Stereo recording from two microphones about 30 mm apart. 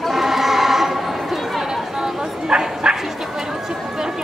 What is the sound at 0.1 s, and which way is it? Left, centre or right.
Chatter, centre.